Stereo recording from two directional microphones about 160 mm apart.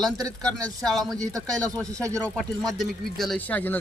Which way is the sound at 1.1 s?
20° right (ahead or behind).